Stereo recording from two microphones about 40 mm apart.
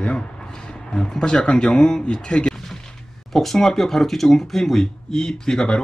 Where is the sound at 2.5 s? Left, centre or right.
Centre.